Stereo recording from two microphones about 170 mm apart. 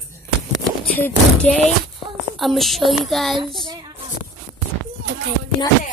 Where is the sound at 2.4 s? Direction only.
Centre (ahead or behind).